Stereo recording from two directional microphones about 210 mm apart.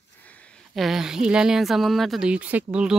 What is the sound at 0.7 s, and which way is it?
A woman's voice, centre (ahead or behind).